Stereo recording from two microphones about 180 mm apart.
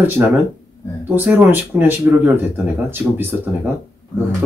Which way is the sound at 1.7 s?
10° right (ahead or behind).